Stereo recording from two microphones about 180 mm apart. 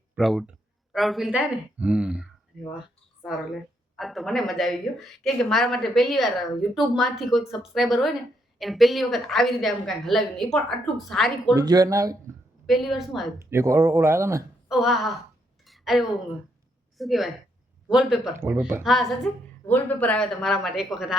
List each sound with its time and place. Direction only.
0.2 s speech: centre (ahead or behind)
3.2 s speech: centre (ahead or behind)
11.5 s speech: 20° right (ahead or behind)
12.6 s speech: centre (ahead or behind)
13.4 s speech: 15° right (ahead or behind)
14.7 s speech: centre (ahead or behind)
15.6 s a sound: centre (ahead or behind)
17.0 s speech: centre (ahead or behind)